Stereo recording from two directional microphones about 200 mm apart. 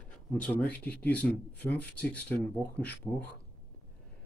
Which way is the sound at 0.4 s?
5° left (ahead or behind).